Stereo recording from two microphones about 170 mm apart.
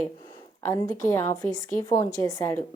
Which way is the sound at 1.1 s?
15° left (ahead or behind).